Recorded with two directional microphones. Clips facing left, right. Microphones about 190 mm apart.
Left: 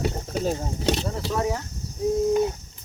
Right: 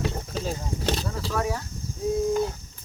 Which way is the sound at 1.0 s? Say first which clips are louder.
Left 2 dB; 25° left (ahead or behind).